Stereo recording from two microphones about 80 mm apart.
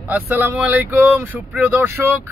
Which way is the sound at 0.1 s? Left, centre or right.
Right.